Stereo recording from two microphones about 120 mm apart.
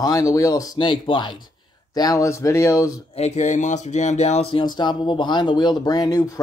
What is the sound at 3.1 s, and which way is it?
Speech, 70° left (ahead or behind).